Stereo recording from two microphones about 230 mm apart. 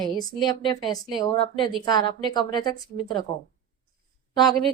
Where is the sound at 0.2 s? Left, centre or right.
Centre.